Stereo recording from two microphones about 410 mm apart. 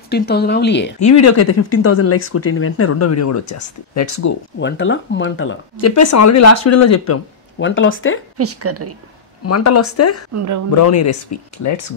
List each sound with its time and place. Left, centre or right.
0.1 s speech: left
1.0 s speech: left
4.6 s speech: left
7.5 s speech: left
8.4 s a woman's voice: right
9.4 s speech: left
10.3 s speech: right
10.7 s speech: left